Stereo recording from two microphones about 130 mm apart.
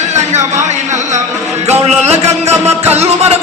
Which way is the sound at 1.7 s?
55° right (ahead or behind).